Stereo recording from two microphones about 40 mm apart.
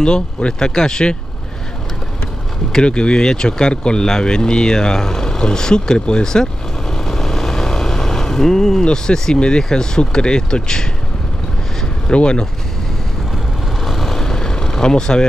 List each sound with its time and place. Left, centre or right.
0.0 s speech: left
2.8 s speech: left
12.1 s speech: left
13.8 s vehicle: centre